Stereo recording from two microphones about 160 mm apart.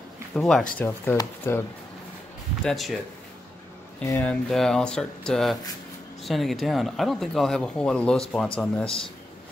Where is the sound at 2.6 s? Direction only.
Centre (ahead or behind).